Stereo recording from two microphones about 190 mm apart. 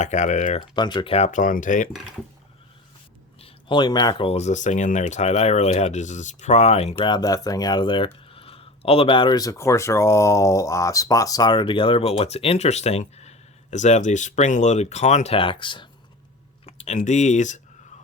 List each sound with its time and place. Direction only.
0.0 s speech: 40° left (ahead or behind)
0.8 s speech: 25° left (ahead or behind); by 1.9 s 45° left (ahead or behind)
3.4 s speech: 25° left (ahead or behind); by 17.6 s 40° left (ahead or behind)